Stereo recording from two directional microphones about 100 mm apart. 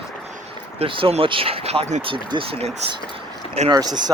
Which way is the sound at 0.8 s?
65° right (ahead or behind).